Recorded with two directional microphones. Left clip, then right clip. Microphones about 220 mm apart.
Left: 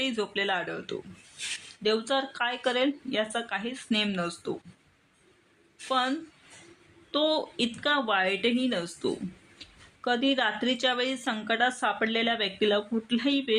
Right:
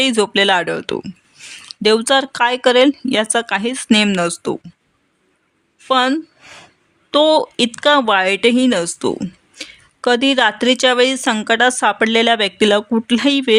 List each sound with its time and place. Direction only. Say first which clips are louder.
0.0 s speech: right 15 dB; 50° right (ahead or behind)
5.9 s speech: right 13 dB; 50° right (ahead or behind)